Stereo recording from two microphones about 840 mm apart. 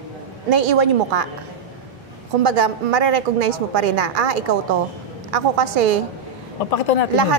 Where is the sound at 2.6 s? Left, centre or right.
Right.